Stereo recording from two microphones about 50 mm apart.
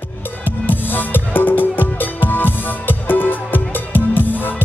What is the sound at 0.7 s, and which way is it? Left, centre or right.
Music, left.